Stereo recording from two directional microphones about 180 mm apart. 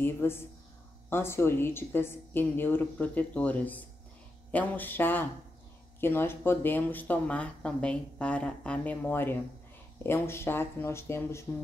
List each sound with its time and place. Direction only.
0.0 s speech: 15° left (ahead or behind)